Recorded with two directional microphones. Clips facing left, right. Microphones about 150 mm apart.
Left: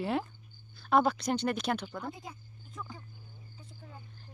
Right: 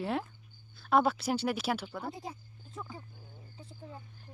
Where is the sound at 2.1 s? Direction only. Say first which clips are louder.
Right 2 dB; 35° right (ahead or behind).